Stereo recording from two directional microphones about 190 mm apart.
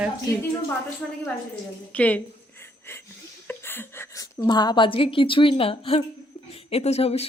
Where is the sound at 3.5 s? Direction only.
10° left (ahead or behind).